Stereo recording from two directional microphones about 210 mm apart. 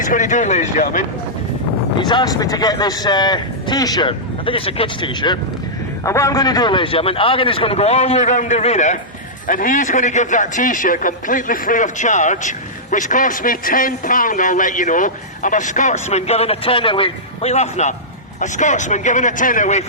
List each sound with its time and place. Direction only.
0.0 s a man's voice: 35° left (ahead or behind)
2.0 s a man's voice: 20° left (ahead or behind); by 19.8 s 35° left (ahead or behind)